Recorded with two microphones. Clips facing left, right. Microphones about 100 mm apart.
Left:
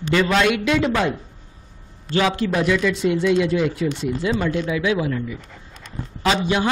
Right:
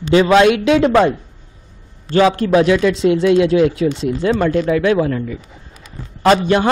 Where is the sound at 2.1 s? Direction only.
40° right (ahead or behind).